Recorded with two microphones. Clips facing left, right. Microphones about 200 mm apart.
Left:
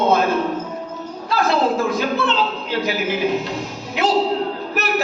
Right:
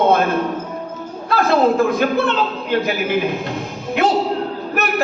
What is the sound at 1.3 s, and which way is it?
A woman's voice, 55° right (ahead or behind).